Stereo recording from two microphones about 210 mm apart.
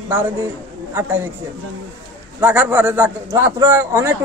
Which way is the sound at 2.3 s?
10° right (ahead or behind).